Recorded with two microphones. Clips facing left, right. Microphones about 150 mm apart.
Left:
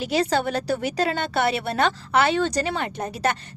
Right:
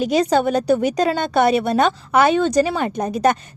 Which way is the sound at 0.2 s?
15° right (ahead or behind).